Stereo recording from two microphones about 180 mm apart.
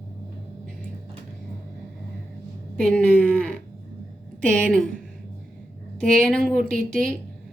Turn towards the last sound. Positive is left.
turn(degrees=5)  # may be behind; listen again after turning